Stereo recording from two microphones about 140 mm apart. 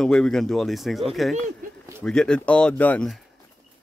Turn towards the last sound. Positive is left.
turn(degrees=10)  # may be behind; listen again after turning